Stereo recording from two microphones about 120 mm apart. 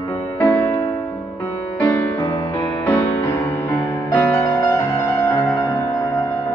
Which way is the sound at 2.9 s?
25° left (ahead or behind).